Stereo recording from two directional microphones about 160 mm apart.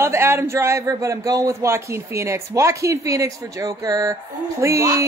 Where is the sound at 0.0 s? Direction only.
15° right (ahead or behind).